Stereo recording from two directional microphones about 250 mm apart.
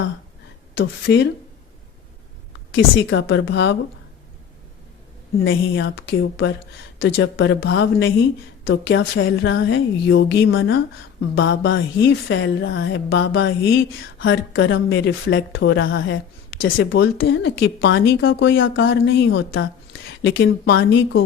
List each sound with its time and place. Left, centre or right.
1.0 s speech: left
2.7 s speech: left
5.4 s speech: left